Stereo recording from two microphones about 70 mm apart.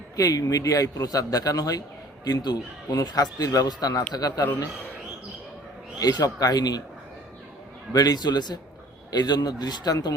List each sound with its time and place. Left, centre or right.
0.2 s a man's voice: left
2.2 s a man's voice: left
6.0 s speech: left
7.9 s speech: left